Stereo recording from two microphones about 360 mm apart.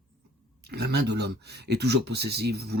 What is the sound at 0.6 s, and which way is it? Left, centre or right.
Speech, right.